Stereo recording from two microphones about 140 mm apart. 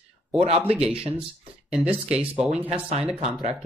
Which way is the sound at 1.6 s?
10° right (ahead or behind).